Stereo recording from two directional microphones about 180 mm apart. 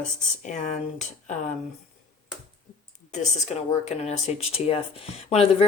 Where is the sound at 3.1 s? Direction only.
40° left (ahead or behind).